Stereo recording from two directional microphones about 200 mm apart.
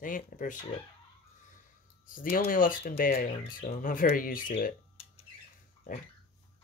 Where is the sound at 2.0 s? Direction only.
45° left (ahead or behind).